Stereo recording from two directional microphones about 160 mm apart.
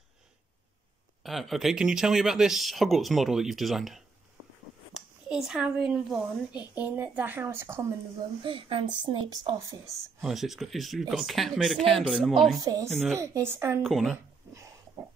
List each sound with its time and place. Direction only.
1.2 s a woman's voice: centre (ahead or behind); by 7.8 s 15° right (ahead or behind)
8.5 s a woman's voice: 35° right (ahead or behind)
10.2 s speech: centre (ahead or behind)
12.6 s a woman's voice: 20° right (ahead or behind)
13.8 s speech: centre (ahead or behind)
14.1 s a sound: 20° right (ahead or behind)